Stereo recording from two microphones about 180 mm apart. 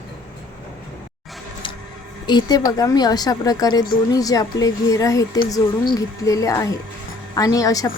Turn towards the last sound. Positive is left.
turn(degrees=20)  # may be behind; listen again after turning